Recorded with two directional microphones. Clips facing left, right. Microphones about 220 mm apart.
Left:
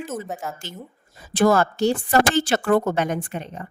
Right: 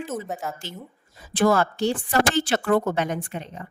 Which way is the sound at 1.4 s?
45° left (ahead or behind).